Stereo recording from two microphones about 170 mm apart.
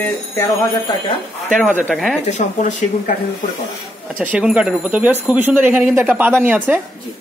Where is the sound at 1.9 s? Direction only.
Centre (ahead or behind).